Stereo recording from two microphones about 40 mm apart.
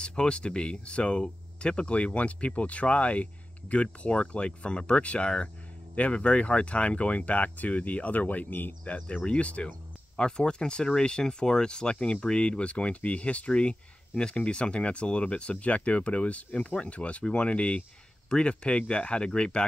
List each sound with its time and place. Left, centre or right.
0.0 s speech: left
8.8 s speech: left